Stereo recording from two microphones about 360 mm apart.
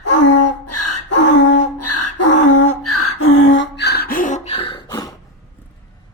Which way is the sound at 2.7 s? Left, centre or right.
Left.